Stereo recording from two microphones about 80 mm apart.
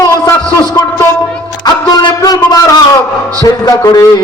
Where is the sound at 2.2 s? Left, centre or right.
Left.